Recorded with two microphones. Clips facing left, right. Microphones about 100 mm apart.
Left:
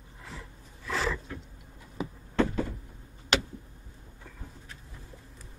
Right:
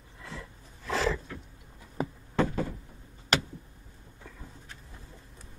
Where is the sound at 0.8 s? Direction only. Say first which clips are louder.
Right 2 dB; 55° right (ahead or behind).